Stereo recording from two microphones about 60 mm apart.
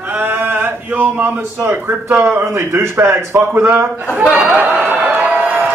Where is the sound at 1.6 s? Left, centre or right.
Right.